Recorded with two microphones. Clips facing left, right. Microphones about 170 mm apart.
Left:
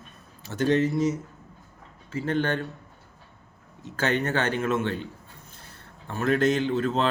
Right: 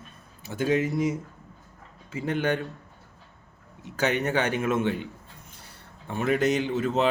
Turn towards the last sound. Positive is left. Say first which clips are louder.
# even
turn(degrees=-10)  # may be behind; listen again after turning